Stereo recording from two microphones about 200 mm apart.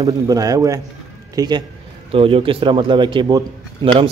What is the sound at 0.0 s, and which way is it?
A man's voice, 15° right (ahead or behind).